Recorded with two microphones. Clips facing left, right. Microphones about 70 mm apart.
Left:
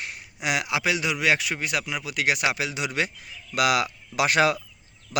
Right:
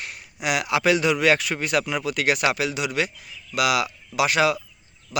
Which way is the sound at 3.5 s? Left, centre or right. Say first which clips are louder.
Even; left.